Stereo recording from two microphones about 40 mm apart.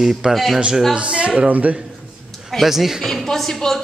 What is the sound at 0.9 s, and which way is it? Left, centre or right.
Speech, right.